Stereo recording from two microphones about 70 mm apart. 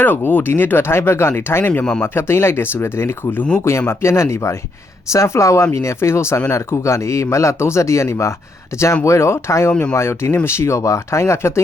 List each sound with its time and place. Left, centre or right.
0.0 s speech: left